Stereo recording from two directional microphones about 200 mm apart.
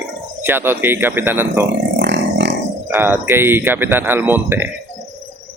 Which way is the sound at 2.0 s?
65° right (ahead or behind).